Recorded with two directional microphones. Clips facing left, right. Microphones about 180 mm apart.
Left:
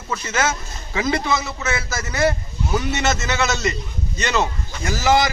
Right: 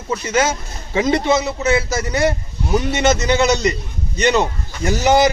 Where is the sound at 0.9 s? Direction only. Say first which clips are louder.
Right 5 dB; 25° right (ahead or behind).